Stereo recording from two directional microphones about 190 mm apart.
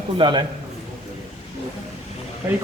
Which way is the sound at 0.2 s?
25° right (ahead or behind).